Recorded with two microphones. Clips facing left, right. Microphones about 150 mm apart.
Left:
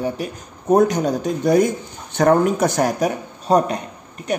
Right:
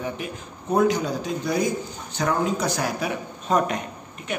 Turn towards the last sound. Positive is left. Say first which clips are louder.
# left 7 dB
turn(degrees=40)  # may be behind; listen again after turning